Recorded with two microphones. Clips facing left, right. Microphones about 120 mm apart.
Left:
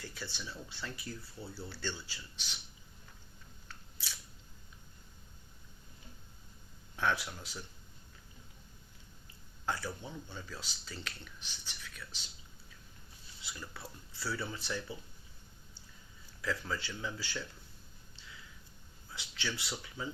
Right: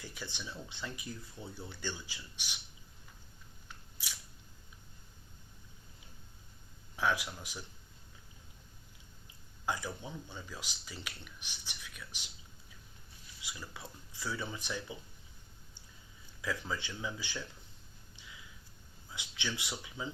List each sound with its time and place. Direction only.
0.0 s speech: 15° right (ahead or behind)
3.7 s scissors: 15° right (ahead or behind)
6.9 s speech: 10° right (ahead or behind)
9.6 s speech: 15° right (ahead or behind)
13.4 s speech: 15° right (ahead or behind)
16.4 s speech: 15° right (ahead or behind)
18.2 s a sound: 15° right (ahead or behind)
19.1 s speech: 15° right (ahead or behind)